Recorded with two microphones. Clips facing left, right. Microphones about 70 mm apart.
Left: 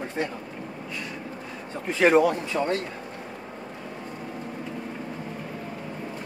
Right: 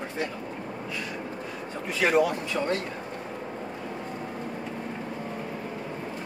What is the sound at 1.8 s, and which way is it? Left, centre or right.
Speech, left.